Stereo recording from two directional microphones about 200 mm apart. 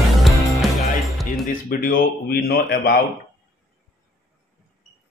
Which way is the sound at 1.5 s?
45° left (ahead or behind).